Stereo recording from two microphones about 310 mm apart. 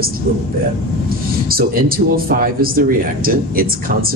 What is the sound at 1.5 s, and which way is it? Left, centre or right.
Speech, right.